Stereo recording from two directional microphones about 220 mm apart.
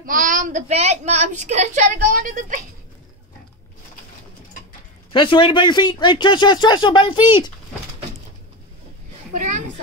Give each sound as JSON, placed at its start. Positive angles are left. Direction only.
{"t": 0.0, "sound": "a woman's voice", "side_deg": -40}
{"t": 5.1, "sound": "speech", "side_deg": 20}
{"t": 9.3, "sound": "a sound", "side_deg": -35}